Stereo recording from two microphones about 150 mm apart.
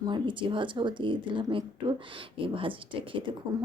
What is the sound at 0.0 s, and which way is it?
Speech, 30° right (ahead or behind).